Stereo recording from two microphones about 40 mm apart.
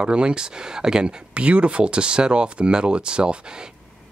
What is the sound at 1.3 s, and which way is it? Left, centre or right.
Speech, right.